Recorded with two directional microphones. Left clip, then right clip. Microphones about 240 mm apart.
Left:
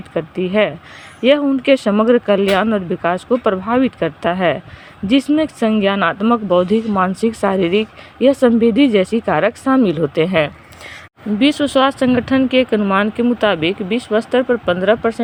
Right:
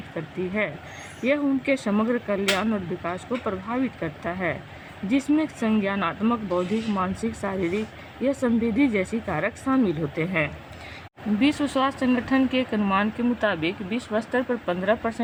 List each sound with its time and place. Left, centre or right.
0.1 s speech: left